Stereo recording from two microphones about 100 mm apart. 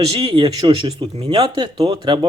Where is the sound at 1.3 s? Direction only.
45° right (ahead or behind).